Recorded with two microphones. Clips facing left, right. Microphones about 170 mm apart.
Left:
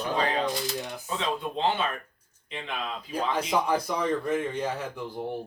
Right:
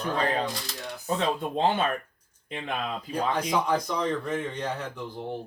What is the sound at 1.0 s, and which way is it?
Speech, 50° right (ahead or behind).